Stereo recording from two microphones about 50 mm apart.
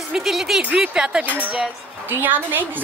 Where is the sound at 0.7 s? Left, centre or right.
Centre.